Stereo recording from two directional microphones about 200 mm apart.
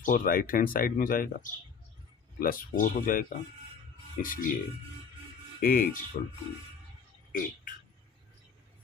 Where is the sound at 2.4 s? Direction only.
45° left (ahead or behind).